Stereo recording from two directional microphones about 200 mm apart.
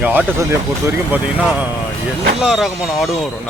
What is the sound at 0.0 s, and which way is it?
Speech, 5° right (ahead or behind).